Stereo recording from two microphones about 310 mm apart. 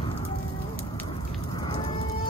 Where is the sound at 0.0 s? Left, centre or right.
Centre.